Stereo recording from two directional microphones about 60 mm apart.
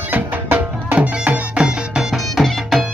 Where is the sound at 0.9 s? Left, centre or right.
Right.